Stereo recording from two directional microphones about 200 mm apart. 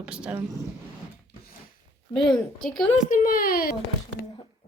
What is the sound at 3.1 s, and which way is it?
Speech, 45° left (ahead or behind).